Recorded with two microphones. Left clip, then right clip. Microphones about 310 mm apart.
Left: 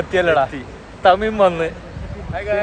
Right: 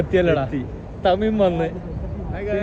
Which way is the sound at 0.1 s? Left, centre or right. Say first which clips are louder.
Left 5 dB; centre.